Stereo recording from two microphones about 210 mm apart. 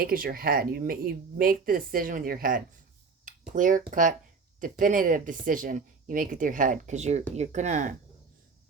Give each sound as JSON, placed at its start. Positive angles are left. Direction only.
{"t": 0.0, "sound": "speech", "side_deg": -45}